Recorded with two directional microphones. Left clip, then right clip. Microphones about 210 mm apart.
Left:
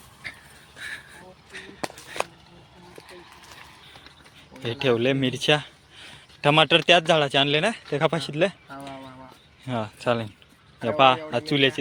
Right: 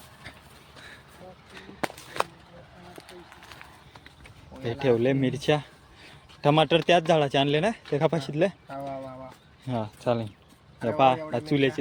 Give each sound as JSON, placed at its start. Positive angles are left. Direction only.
{"t": 0.2, "sound": "duck", "side_deg": -15}
{"t": 4.6, "sound": "a man's voice", "side_deg": 0}
{"t": 9.6, "sound": "a man's voice", "side_deg": 0}